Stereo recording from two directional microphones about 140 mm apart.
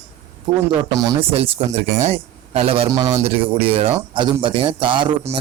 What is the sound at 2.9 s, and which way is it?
Speech, 25° right (ahead or behind).